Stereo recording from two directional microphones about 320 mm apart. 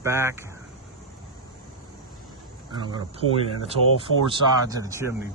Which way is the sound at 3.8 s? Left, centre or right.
Right.